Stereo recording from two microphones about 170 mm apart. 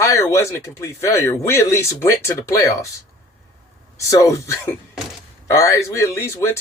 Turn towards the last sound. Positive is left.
turn(degrees=15)  # may be behind; listen again after turning